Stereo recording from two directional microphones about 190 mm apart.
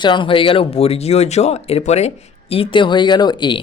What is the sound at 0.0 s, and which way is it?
Speech, 25° left (ahead or behind).